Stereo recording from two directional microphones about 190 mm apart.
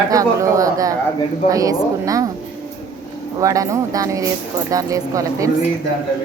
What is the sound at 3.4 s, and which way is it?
Speech, 15° right (ahead or behind).